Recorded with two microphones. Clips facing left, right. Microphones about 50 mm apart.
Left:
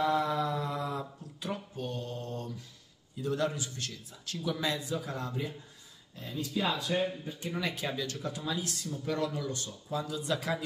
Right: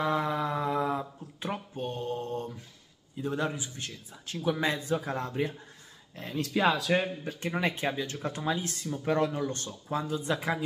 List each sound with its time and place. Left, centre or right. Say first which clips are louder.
0.0 s a sound: even; right
3.2 s a man's voice: even; right
4.5 s speech: right 5 dB; right
6.1 s speech: right 4 dB; right
7.3 s speech: right 4 dB; right
7.6 s a man's voice: right 4 dB; right
8.3 s speech: right 6 dB; right